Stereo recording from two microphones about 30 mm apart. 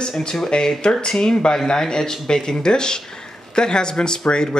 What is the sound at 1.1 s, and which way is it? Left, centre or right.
Speech, centre.